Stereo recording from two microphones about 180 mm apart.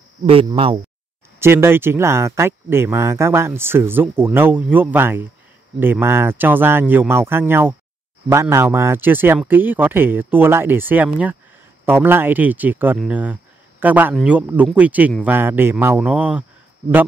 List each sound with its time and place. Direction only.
0.2 s speech: 30° right (ahead or behind)
1.4 s speech: 15° right (ahead or behind)